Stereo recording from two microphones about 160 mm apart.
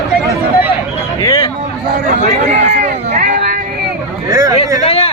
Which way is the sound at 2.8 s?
55° right (ahead or behind).